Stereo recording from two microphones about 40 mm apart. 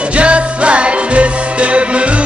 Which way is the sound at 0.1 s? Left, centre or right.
Right.